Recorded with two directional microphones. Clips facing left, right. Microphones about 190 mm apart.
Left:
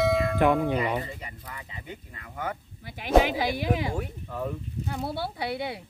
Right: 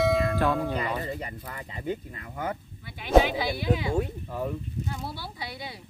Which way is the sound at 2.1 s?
30° right (ahead or behind).